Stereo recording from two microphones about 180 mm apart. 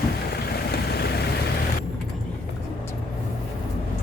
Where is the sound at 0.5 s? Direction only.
60° left (ahead or behind).